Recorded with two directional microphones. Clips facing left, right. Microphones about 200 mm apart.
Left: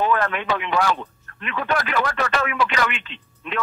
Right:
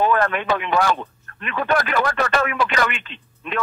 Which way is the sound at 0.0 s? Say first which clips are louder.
Right 2 dB; 45° right (ahead or behind).